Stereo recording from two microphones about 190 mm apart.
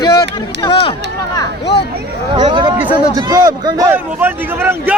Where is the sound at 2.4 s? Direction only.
25° right (ahead or behind).